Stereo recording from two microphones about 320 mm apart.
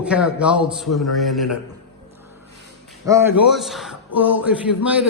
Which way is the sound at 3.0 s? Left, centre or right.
Centre.